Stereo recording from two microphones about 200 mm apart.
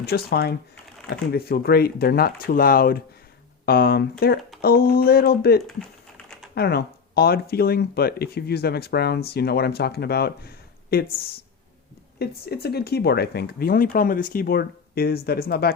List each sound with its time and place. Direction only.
0.0 s speech: 50° left (ahead or behind)
12.2 s speech: 50° left (ahead or behind)